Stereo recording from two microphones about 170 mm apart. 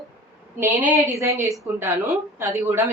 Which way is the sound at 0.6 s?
15° right (ahead or behind).